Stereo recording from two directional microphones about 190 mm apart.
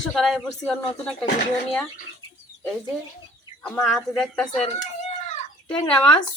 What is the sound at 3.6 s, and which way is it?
Speech, 5° left (ahead or behind).